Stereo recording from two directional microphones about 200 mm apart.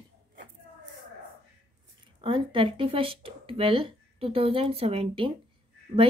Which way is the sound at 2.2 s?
25° right (ahead or behind).